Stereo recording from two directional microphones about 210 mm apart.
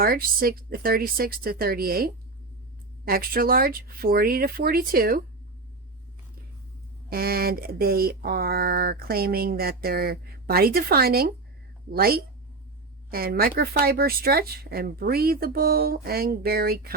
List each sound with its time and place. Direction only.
0.0 s speech: 45° right (ahead or behind)
7.1 s speech: 45° right (ahead or behind)